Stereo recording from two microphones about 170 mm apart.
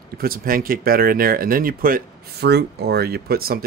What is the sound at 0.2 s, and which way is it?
Speech, 55° right (ahead or behind).